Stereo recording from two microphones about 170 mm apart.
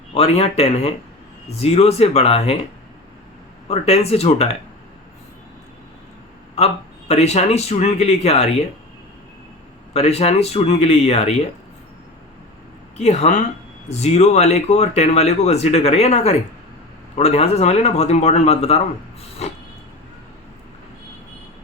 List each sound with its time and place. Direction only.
0.1 s speech: 35° left (ahead or behind)
3.7 s speech: 40° left (ahead or behind)
7.1 s speech: 40° left (ahead or behind)
9.9 s speech: 40° left (ahead or behind)
13.0 s speech: 40° left (ahead or behind)
19.4 s vehicle: 40° left (ahead or behind)